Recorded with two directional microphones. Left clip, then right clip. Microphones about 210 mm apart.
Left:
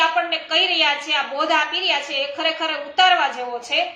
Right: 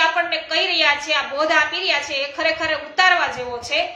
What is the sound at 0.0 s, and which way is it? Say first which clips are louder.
A woman's voice: right 1 dB; 5° left (ahead or behind).